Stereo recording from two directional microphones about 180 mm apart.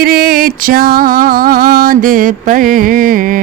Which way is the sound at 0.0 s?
60° right (ahead or behind).